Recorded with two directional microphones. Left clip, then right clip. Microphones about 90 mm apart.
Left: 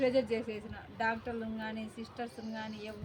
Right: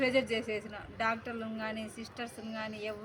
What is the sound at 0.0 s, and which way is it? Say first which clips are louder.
A woman's voice: even; 35° left (ahead or behind).